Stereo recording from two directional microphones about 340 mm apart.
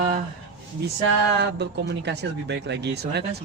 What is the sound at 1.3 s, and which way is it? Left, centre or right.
Speech, right.